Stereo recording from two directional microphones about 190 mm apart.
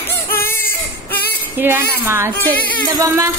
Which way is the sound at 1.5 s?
10° right (ahead or behind).